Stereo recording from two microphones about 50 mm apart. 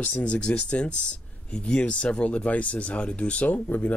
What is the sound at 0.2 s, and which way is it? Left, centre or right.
Speech, left.